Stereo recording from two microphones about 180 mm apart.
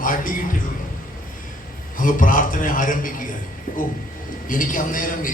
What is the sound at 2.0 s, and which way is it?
A man's voice, 50° left (ahead or behind).